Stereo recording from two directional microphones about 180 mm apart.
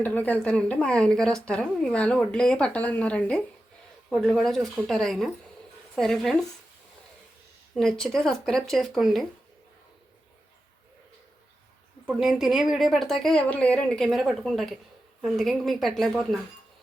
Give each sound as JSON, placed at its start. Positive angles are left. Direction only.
{"t": 0.0, "sound": "a woman's voice", "side_deg": 10}
{"t": 7.8, "sound": "speech", "side_deg": 5}
{"t": 12.0, "sound": "speech", "side_deg": 0}